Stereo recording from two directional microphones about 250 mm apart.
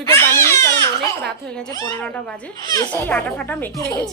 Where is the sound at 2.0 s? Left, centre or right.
Centre.